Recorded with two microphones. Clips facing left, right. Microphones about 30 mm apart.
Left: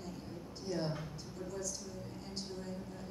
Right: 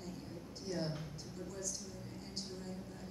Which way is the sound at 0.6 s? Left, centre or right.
Centre.